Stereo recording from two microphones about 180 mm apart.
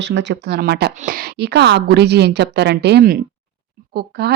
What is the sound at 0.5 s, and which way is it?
A woman's voice, 60° right (ahead or behind).